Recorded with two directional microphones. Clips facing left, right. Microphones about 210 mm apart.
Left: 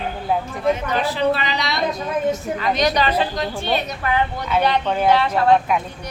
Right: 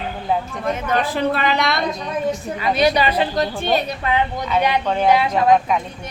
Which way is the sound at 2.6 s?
10° right (ahead or behind).